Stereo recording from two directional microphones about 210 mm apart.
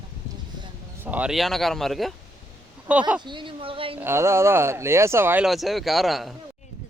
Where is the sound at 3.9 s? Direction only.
10° right (ahead or behind).